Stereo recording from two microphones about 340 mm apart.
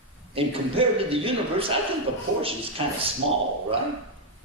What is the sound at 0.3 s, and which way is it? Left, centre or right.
A man's voice, centre.